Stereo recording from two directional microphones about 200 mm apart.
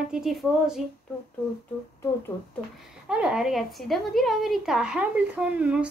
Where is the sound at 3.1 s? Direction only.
5° right (ahead or behind).